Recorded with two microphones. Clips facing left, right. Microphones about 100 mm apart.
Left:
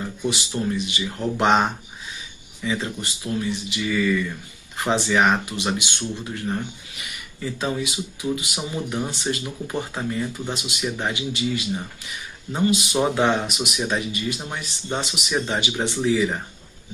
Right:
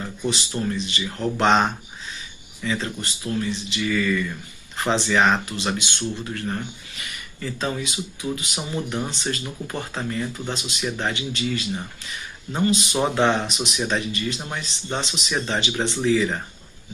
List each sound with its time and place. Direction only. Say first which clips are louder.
0.2 s speech: even; 10° left (ahead or behind)
7.0 s speech: left 1 dB; 15° left (ahead or behind)